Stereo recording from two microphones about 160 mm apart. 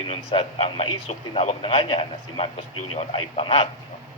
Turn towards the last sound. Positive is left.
turn(degrees=35)  # may be behind; listen again after turning